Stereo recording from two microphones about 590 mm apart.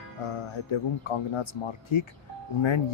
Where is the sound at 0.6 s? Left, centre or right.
Left.